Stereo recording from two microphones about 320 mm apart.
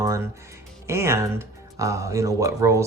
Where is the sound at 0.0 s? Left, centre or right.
Centre.